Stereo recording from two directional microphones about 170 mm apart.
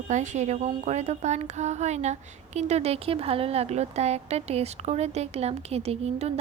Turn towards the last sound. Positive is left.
turn(degrees=-40)  # may be behind; listen again after turning